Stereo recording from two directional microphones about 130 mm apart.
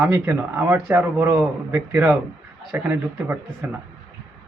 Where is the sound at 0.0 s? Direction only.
15° right (ahead or behind).